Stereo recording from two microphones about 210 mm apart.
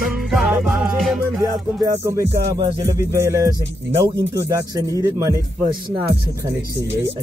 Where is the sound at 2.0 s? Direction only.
15° right (ahead or behind).